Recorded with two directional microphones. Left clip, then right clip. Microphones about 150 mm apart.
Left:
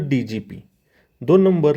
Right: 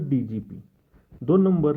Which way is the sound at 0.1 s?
25° left (ahead or behind).